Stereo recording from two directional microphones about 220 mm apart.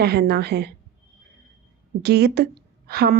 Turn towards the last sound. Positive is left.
turn(degrees=-45)  # may be behind; listen again after turning